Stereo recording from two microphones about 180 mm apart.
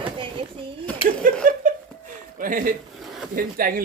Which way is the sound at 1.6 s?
50° right (ahead or behind).